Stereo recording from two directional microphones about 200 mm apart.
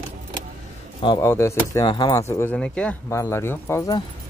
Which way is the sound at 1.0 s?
20° left (ahead or behind).